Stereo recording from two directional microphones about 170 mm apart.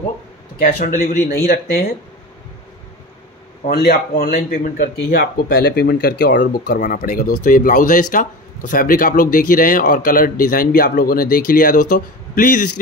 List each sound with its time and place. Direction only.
0.6 s speech: 55° left (ahead or behind)
3.6 s speech: 65° left (ahead or behind)
4.9 s speech: 70° left (ahead or behind)
6.8 s speech: 55° left (ahead or behind)